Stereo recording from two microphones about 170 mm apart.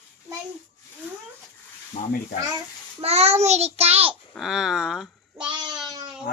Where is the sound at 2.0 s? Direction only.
45° left (ahead or behind).